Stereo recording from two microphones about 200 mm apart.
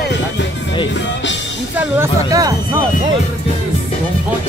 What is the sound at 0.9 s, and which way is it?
Music, 65° left (ahead or behind).